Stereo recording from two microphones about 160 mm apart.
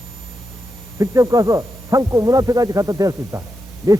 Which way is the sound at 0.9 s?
20° right (ahead or behind).